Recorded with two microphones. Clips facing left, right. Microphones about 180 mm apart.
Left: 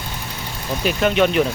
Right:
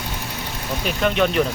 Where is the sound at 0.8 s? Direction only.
5° left (ahead or behind).